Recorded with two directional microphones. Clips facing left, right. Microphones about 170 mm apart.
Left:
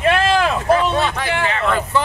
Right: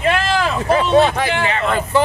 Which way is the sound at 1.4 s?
5° right (ahead or behind).